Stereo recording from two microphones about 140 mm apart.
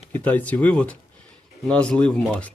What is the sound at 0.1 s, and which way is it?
Speech, 10° left (ahead or behind).